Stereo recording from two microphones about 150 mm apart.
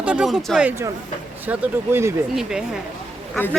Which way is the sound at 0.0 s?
5° right (ahead or behind).